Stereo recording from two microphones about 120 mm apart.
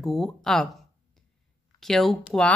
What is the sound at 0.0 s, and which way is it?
Speech, 5° left (ahead or behind).